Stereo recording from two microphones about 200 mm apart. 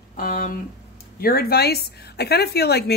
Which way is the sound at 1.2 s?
50° left (ahead or behind).